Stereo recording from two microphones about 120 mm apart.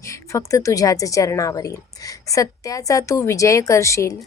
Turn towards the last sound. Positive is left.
turn(degrees=25)  # may be behind; listen again after turning